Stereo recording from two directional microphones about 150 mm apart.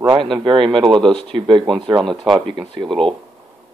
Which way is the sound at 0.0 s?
30° right (ahead or behind).